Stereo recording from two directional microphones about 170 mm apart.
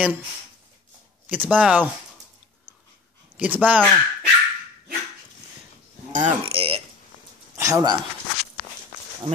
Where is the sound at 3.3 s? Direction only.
10° right (ahead or behind).